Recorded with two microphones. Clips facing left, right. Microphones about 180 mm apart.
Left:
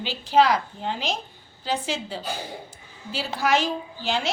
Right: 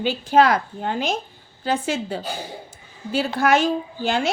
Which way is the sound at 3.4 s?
50° right (ahead or behind).